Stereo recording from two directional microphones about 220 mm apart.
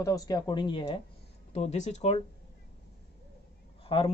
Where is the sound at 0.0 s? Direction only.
15° left (ahead or behind).